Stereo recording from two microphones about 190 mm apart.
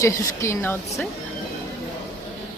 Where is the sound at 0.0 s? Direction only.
15° left (ahead or behind).